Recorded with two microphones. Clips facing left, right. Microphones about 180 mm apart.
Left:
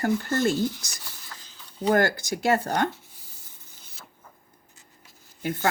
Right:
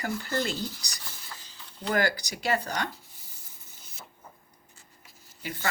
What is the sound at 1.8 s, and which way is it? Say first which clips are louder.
Speech: left 5 dB; 50° left (ahead or behind).